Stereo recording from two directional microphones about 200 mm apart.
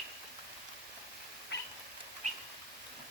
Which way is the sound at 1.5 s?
60° left (ahead or behind).